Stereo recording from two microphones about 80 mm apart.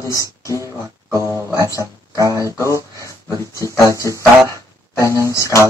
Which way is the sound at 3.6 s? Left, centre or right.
Left.